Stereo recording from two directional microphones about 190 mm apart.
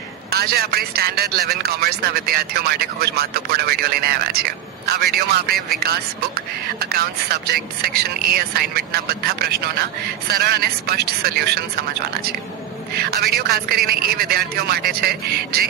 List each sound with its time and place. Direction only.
0.3 s a man's voice: 55° right (ahead or behind)
5.5 s speech: centre (ahead or behind)
6.7 s a man's voice: 55° right (ahead or behind)
13.0 s a man's voice: 55° right (ahead or behind)